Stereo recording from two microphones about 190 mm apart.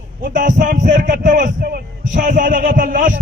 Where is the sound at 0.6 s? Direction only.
40° right (ahead or behind).